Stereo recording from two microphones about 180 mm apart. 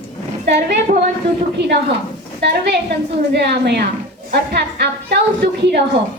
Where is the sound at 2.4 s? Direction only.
70° right (ahead or behind).